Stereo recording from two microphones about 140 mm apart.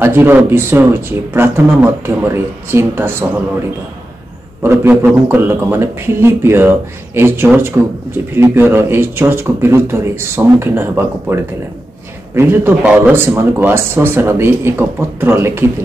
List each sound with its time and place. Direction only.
0.0 s speech: 15° right (ahead or behind)
4.6 s speech: 15° right (ahead or behind)
12.4 s speech: 15° right (ahead or behind)